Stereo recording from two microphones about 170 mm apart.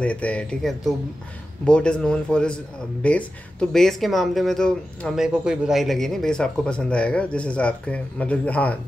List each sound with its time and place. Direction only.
0.0 s speech: 10° left (ahead or behind)